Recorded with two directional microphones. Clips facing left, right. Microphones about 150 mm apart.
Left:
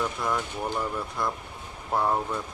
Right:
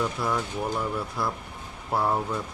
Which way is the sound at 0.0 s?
5° right (ahead or behind).